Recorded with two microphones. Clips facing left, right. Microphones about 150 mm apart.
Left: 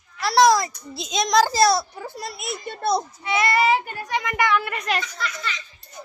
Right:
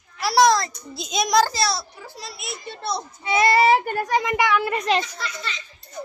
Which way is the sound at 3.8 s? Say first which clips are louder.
Right 5 dB; 45° right (ahead or behind).